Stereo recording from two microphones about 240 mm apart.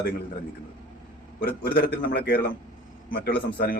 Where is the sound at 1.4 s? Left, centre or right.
Left.